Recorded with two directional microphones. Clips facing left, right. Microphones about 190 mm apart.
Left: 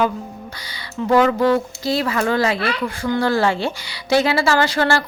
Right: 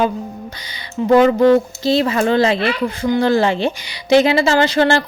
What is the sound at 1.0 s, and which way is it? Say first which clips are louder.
Speech: right 4 dB; 20° right (ahead or behind).